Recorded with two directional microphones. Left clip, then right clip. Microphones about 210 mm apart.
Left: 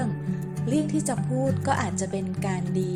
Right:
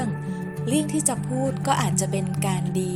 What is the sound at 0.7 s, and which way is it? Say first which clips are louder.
Speech: right 2 dB; 25° right (ahead or behind).